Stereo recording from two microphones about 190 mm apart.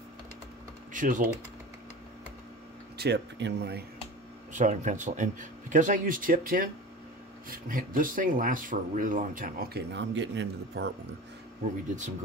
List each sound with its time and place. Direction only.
0.9 s speech: 45° right (ahead or behind)
3.0 s speech: 65° right (ahead or behind)
4.5 s speech: 40° right (ahead or behind); by 10.9 s 65° right (ahead or behind)